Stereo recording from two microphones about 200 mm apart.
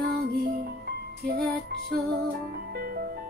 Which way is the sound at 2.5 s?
50° right (ahead or behind).